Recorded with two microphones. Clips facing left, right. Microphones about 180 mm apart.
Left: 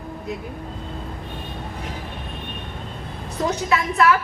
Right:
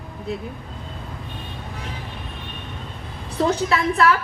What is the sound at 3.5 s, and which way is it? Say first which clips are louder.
Speech: right 1 dB; 30° right (ahead or behind).